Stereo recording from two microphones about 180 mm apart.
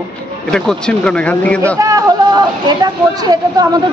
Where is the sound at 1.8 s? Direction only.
20° right (ahead or behind).